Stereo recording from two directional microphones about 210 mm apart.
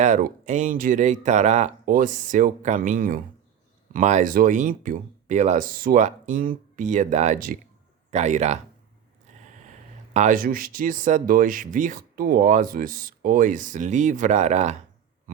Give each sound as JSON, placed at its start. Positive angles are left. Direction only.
{"t": 0.0, "sound": "speech", "side_deg": -35}
{"t": 10.2, "sound": "speech", "side_deg": -40}